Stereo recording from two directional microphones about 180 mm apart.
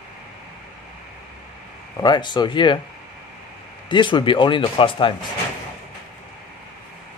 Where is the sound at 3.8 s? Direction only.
25° left (ahead or behind).